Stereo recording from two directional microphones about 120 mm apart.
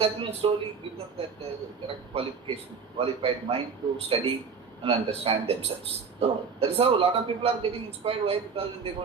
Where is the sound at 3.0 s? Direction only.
55° right (ahead or behind).